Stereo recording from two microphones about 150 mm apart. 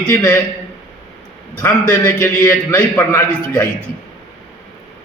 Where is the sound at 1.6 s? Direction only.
15° left (ahead or behind).